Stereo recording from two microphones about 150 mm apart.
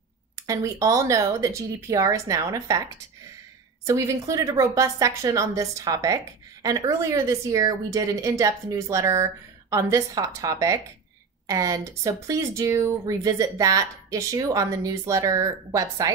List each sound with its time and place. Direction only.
0.4 s a woman's voice: 20° right (ahead or behind)
3.8 s a woman's voice: 20° right (ahead or behind)